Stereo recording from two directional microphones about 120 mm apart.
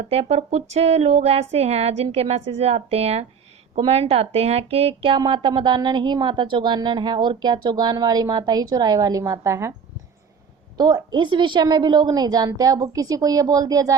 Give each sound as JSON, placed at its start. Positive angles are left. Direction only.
{"t": 0.0, "sound": "speech", "side_deg": -60}
{"t": 10.8, "sound": "a woman's voice", "side_deg": -35}